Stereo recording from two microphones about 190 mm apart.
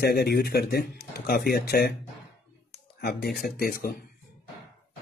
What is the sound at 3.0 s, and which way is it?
A man's voice, 55° left (ahead or behind).